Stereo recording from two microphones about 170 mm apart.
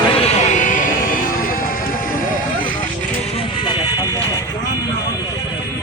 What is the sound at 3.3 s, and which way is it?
Vehicle, 25° left (ahead or behind).